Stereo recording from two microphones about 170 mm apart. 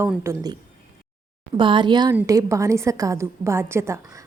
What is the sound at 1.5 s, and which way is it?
A woman's voice, 30° right (ahead or behind).